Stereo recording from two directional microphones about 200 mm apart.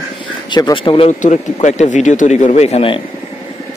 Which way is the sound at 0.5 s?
25° left (ahead or behind).